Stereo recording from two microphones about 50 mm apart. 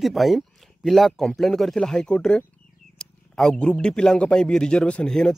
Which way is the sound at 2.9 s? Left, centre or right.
Centre.